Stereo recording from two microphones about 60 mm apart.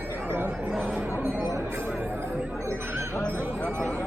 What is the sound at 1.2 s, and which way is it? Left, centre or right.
Speech, right.